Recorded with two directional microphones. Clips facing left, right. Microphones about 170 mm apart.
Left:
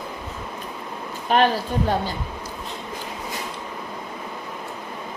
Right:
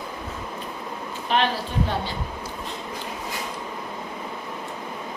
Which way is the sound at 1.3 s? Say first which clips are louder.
Left 4 dB; 45° left (ahead or behind).